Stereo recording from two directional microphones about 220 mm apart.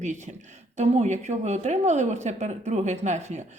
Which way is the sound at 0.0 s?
35° right (ahead or behind).